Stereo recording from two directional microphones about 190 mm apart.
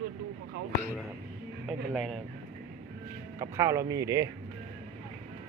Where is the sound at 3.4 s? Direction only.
15° right (ahead or behind).